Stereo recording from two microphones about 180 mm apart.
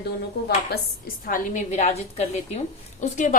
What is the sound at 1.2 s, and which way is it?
A woman's voice, 45° left (ahead or behind).